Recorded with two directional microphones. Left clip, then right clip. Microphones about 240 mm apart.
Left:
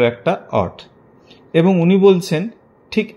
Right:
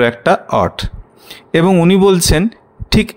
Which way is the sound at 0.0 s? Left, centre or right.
Right.